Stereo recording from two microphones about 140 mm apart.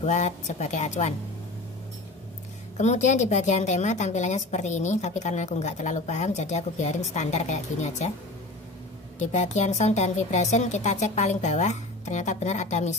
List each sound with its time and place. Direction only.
0.0 s a woman's voice: 55° left (ahead or behind)
2.8 s a woman's voice: 55° left (ahead or behind)
9.2 s a woman's voice: 55° left (ahead or behind)